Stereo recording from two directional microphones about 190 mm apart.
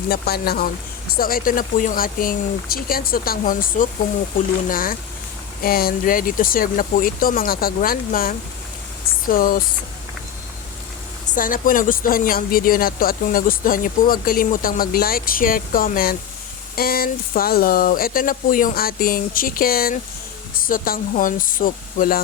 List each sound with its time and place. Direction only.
0.1 s speech: 55° left (ahead or behind)
11.3 s speech: 45° left (ahead or behind)